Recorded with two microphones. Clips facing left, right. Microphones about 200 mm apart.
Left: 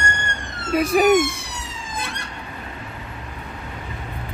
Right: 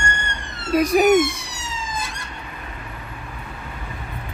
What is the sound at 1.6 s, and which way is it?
Emergency vehicle, 60° left (ahead or behind).